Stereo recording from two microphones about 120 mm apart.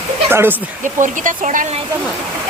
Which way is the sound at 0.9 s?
90° right.